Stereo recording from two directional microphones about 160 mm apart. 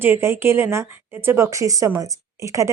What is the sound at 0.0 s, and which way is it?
A woman's voice, 15° right (ahead or behind).